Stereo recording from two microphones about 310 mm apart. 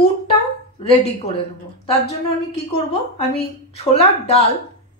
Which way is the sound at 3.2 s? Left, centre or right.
Centre.